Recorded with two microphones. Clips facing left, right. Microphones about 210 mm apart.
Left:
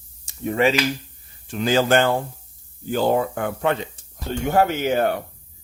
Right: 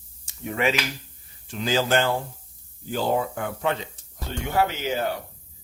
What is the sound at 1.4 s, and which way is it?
Speech, 55° left (ahead or behind).